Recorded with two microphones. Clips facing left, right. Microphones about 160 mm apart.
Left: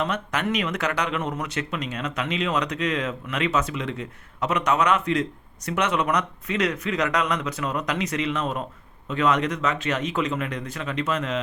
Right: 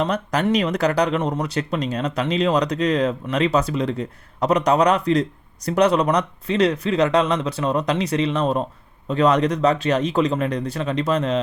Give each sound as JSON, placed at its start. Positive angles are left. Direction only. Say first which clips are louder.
{"t": 0.0, "sound": "speech", "louder": "right 5 dB", "side_deg": -35}